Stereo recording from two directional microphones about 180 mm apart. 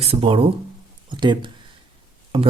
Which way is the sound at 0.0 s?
30° right (ahead or behind).